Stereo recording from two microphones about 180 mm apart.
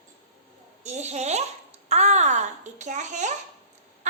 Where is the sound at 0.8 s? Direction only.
40° right (ahead or behind).